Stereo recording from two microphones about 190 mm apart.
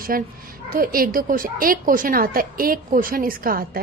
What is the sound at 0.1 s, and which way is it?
A woman's voice, 50° right (ahead or behind).